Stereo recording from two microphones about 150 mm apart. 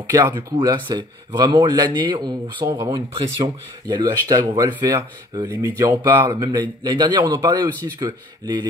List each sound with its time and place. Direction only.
0.0 s speech: 20° right (ahead or behind)